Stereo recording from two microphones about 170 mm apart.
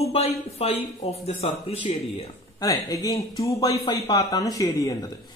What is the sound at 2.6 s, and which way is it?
A woman's voice, 20° left (ahead or behind).